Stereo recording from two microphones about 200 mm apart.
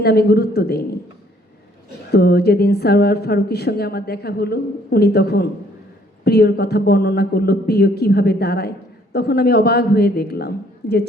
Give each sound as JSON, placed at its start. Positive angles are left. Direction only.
{"t": 0.0, "sound": "a woman's voice", "side_deg": 50}
{"t": 2.1, "sound": "a woman's voice", "side_deg": 50}